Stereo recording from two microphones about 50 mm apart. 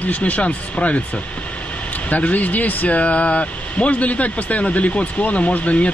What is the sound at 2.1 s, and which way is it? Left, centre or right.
Speech, left.